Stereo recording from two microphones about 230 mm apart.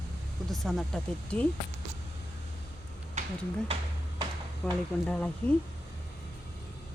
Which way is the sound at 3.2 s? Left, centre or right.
Right.